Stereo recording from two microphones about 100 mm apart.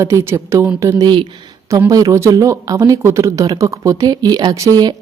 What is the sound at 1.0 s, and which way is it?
Speech, 50° right (ahead or behind).